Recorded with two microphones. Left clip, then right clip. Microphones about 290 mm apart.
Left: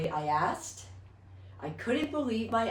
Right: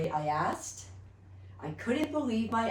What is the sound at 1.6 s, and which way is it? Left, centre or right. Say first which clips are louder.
Speech: left 1 dB; centre.